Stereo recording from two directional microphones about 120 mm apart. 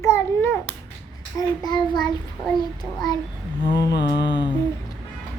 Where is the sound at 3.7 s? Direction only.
40° left (ahead or behind).